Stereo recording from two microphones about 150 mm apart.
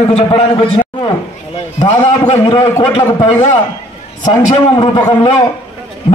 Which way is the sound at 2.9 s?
45° left (ahead or behind).